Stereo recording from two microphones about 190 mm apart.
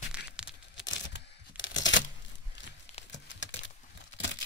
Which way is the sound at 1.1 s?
75° left (ahead or behind).